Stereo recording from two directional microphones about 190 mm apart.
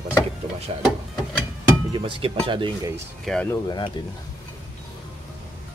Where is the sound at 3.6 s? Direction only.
25° left (ahead or behind).